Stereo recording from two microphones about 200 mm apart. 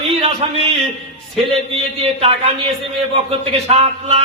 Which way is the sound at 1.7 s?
30° right (ahead or behind).